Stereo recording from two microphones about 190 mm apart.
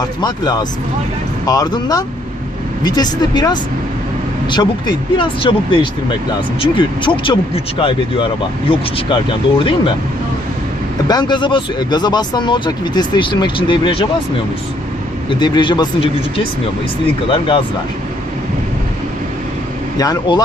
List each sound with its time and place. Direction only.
0.2 s speech: 20° left (ahead or behind)
11.1 s speech: 25° left (ahead or behind)
15.3 s speech: 25° left (ahead or behind)
20.0 s speech: 20° left (ahead or behind)